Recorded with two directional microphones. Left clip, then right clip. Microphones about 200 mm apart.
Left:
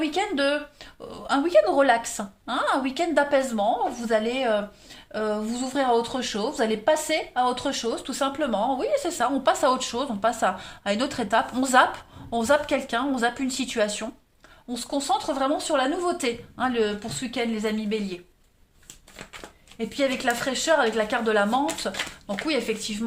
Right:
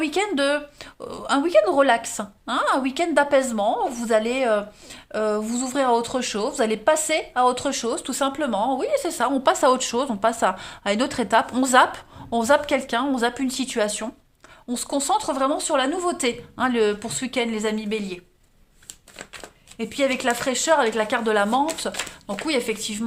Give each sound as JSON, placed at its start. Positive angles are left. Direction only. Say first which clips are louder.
{"t": 0.0, "sound": "speech", "louder": "right 2 dB", "side_deg": -40}
{"t": 14.7, "sound": "speech", "louder": "right 3 dB", "side_deg": -40}
{"t": 19.8, "sound": "speech", "louder": "right 2 dB", "side_deg": -35}